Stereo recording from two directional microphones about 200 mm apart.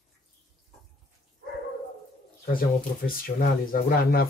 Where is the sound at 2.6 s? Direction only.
45° left (ahead or behind).